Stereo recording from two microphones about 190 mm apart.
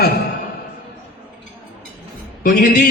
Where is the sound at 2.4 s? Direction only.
45° left (ahead or behind).